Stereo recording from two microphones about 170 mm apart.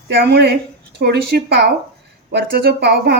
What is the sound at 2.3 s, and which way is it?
Speech, 65° right (ahead or behind).